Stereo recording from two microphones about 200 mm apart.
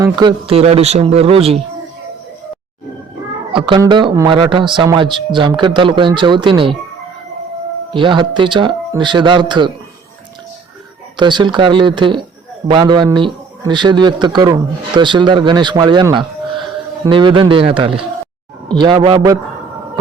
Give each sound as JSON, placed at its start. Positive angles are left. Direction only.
{"t": 0.0, "sound": "a man's voice", "side_deg": -20}
{"t": 3.5, "sound": "a man's voice", "side_deg": -25}
{"t": 7.9, "sound": "a man's voice", "side_deg": -25}
{"t": 11.2, "sound": "a man's voice", "side_deg": -25}